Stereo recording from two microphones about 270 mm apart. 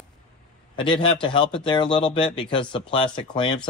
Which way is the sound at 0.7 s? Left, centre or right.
Centre.